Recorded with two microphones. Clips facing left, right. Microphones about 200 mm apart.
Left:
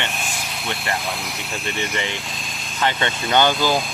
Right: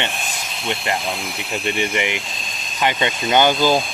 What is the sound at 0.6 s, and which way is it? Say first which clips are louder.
Speech: right 4 dB; 20° right (ahead or behind).